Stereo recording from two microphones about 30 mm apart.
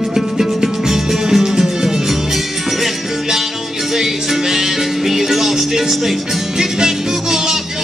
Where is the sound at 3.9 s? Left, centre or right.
Centre.